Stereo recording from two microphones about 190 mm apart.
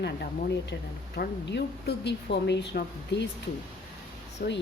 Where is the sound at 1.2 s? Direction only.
60° left (ahead or behind).